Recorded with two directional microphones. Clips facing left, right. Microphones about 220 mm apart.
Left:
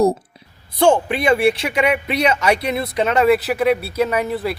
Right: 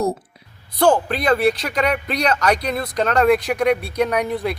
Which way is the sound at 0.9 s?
10° left (ahead or behind).